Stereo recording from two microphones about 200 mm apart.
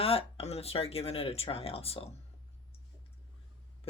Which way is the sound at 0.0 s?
30° left (ahead or behind).